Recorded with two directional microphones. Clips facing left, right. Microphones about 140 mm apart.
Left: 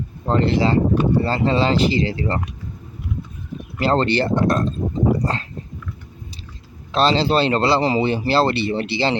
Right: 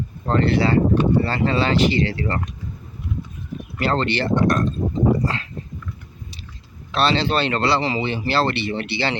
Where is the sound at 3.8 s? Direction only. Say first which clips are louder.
Left 3 dB; 35° left (ahead or behind).